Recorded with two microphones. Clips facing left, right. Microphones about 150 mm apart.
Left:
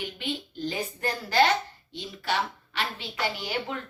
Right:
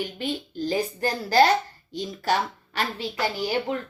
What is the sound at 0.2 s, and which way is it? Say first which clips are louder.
A woman's voice: right 4 dB; 40° right (ahead or behind).